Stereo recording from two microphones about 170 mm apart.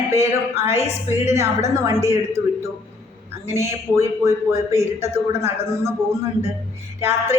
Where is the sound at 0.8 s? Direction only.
40° left (ahead or behind).